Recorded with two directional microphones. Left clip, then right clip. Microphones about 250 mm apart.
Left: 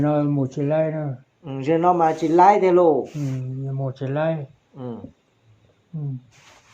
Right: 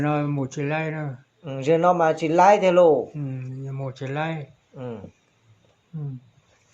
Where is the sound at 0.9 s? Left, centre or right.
Right.